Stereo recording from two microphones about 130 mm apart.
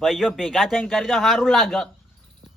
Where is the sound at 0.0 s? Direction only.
Centre (ahead or behind).